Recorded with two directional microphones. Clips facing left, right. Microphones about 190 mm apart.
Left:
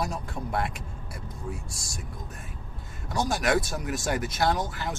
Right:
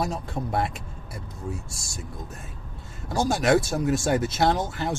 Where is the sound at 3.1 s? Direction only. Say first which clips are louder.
Right 4 dB; 25° right (ahead or behind).